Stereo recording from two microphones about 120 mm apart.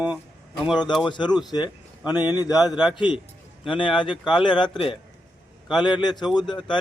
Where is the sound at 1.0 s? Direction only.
40° left (ahead or behind).